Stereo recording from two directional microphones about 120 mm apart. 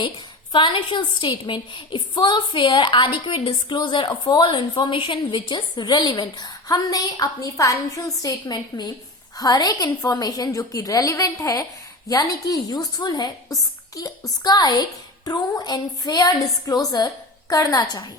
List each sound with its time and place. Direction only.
0.5 s a woman's voice: 45° left (ahead or behind)